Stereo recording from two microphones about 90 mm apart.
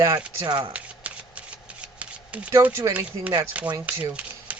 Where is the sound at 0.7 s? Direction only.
15° right (ahead or behind).